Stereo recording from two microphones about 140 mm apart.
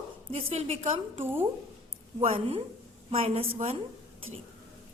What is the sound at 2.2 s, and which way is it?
A woman's voice, 45° right (ahead or behind).